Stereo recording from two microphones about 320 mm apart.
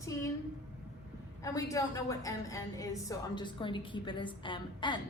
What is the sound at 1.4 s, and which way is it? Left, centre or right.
A woman's voice, centre.